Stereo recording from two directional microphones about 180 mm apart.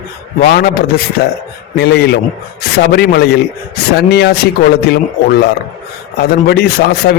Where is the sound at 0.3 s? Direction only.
60° left (ahead or behind).